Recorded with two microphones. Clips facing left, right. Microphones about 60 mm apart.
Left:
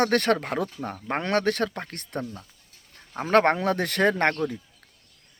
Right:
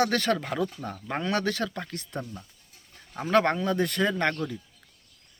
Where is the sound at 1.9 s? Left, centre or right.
Left.